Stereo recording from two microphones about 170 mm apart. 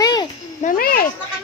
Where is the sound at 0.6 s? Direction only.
55° left (ahead or behind).